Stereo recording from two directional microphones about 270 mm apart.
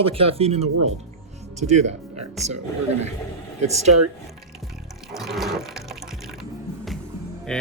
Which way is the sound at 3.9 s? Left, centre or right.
Right.